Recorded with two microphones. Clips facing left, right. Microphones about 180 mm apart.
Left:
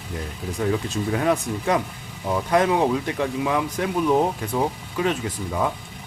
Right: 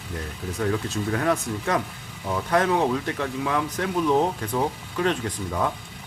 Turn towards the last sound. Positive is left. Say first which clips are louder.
# left 1 dB
turn(degrees=5)  # may be behind; listen again after turning